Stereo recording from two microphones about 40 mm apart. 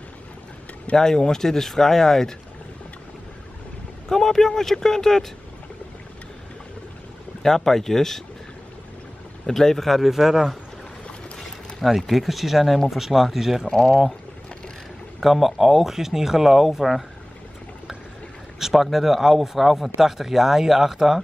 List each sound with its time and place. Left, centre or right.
0.9 s speech: centre
4.1 s speech: centre
7.4 s speech: centre
9.5 s speech: centre
13.7 s speech: centre
15.1 s speech: centre
18.6 s speech: centre